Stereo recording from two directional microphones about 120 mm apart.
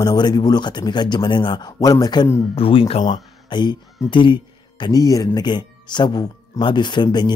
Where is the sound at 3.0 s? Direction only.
40° left (ahead or behind).